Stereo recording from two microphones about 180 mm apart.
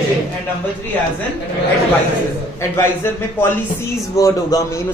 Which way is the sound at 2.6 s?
15° left (ahead or behind).